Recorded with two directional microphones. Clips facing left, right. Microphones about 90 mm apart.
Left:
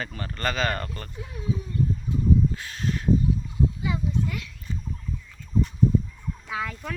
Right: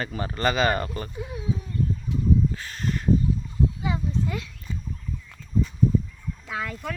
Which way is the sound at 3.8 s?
30° right (ahead or behind).